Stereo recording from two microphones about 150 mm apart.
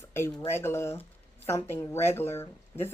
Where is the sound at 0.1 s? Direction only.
10° left (ahead or behind).